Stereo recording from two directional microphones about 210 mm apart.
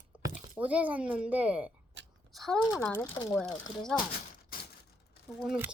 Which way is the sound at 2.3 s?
Centre (ahead or behind).